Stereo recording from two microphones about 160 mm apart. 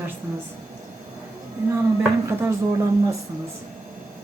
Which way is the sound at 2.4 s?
20° right (ahead or behind).